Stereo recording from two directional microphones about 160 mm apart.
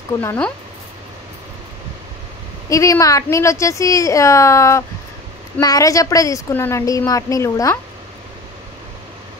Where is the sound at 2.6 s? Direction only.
20° left (ahead or behind).